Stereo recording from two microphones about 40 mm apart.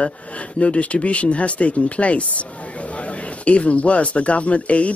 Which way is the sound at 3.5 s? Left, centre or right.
Left.